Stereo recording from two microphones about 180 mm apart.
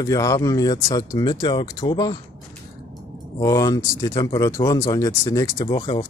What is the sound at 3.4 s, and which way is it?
Speech, 20° left (ahead or behind).